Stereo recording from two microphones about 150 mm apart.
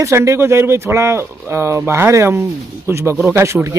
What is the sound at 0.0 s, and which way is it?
Speech, 20° right (ahead or behind).